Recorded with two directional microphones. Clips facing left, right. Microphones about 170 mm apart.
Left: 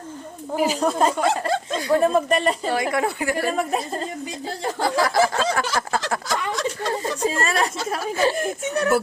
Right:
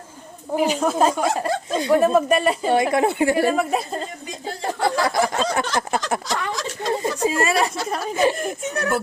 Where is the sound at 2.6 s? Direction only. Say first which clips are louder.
Right 4 dB; 25° right (ahead or behind).